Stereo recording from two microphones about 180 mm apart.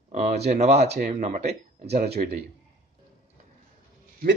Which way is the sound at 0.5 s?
35° right (ahead or behind).